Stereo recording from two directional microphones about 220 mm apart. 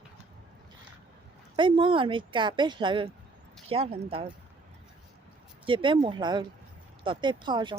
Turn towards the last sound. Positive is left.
turn(degrees=-20)  # may be behind; listen again after turning